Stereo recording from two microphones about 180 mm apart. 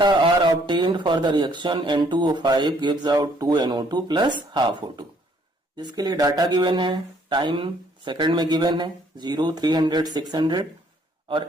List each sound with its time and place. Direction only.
0.0 s speech: 25° right (ahead or behind)